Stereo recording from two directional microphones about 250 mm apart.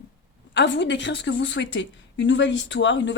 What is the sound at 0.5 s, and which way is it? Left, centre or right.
Speech, left.